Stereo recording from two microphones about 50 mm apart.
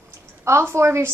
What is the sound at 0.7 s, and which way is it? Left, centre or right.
Speech, right.